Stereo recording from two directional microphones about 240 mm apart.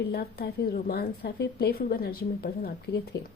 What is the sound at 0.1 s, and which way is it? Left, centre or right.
Speech, left.